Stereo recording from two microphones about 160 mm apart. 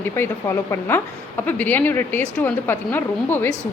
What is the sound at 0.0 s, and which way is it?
A woman's voice, 15° left (ahead or behind).